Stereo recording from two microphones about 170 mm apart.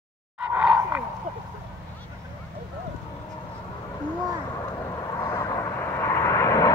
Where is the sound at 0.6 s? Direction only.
10° right (ahead or behind).